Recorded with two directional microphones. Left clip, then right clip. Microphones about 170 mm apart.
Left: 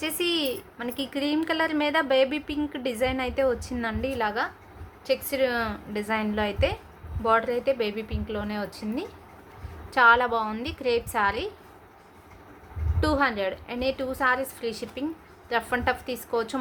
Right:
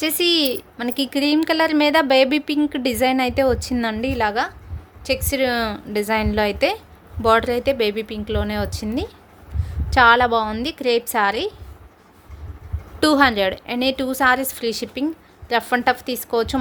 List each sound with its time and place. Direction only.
0.0 s a woman's voice: 40° right (ahead or behind)
13.0 s a woman's voice: 50° right (ahead or behind)